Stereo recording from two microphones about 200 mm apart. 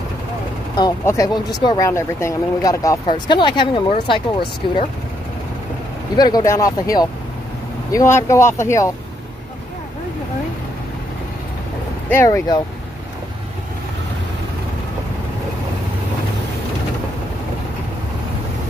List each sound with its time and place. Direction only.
0.7 s speech: 15° left (ahead or behind)
6.1 s speech: 20° left (ahead or behind)
12.1 s speech: 15° left (ahead or behind)